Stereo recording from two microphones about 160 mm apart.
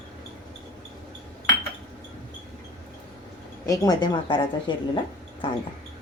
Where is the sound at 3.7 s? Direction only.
25° left (ahead or behind).